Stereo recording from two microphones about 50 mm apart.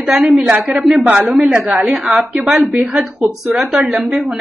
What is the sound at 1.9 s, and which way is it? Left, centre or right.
A woman's voice, centre.